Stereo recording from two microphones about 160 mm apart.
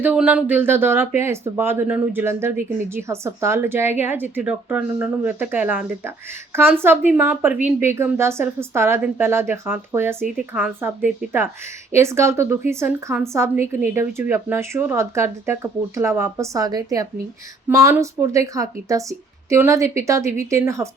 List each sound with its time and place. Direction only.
0.0 s a woman's voice: 10° right (ahead or behind)